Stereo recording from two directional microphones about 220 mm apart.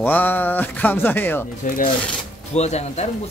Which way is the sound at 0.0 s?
10° left (ahead or behind).